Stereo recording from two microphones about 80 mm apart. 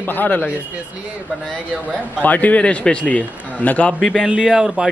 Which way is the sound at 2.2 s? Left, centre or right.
Centre.